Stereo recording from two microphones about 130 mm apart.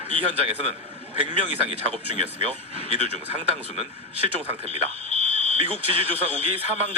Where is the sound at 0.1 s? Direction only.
45° right (ahead or behind).